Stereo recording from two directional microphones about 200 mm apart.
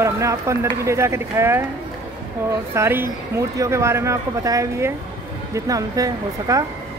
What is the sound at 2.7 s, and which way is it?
Speech, 10° right (ahead or behind).